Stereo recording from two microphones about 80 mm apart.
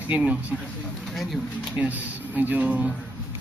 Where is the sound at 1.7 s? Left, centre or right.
Right.